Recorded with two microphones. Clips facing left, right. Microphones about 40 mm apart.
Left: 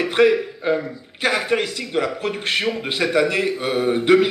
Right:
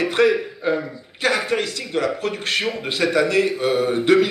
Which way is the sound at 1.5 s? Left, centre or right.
Centre.